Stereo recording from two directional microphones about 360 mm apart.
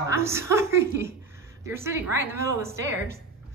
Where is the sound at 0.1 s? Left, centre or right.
Centre.